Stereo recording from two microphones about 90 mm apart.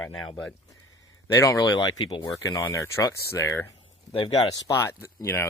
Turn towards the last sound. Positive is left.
turn(degrees=30)  # may be behind; listen again after turning